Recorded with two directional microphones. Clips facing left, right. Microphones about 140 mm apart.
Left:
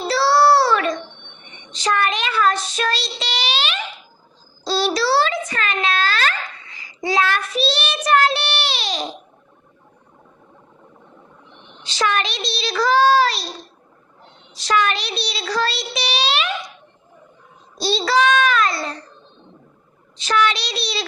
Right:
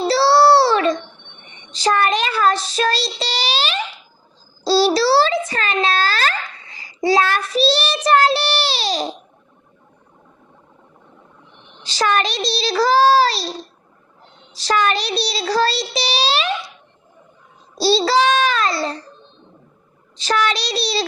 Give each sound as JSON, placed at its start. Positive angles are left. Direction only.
{"t": 0.1, "sound": "child singing", "side_deg": -30}
{"t": 4.6, "sound": "a sound", "side_deg": -35}
{"t": 11.8, "sound": "child singing", "side_deg": -35}
{"t": 14.5, "sound": "child singing", "side_deg": -35}
{"t": 17.7, "sound": "child singing", "side_deg": -35}
{"t": 20.1, "sound": "child singing", "side_deg": -35}